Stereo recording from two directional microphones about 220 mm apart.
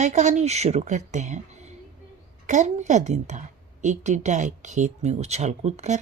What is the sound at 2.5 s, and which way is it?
Speech, 35° right (ahead or behind).